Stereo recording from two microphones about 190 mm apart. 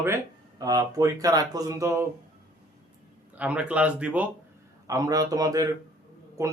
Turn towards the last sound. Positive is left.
turn(degrees=-15)  # may be behind; listen again after turning